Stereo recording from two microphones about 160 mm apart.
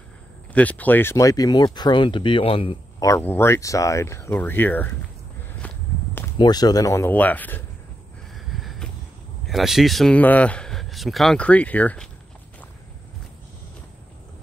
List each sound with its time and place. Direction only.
0.6 s speech: 10° left (ahead or behind); by 2.8 s 35° left (ahead or behind)
3.0 s speech: 15° left (ahead or behind)
5.6 s walk: 10° left (ahead or behind)
6.3 s speech: 25° left (ahead or behind); by 7.6 s 10° left (ahead or behind)
8.5 s a sound: centre (ahead or behind)
9.5 s speech: centre (ahead or behind)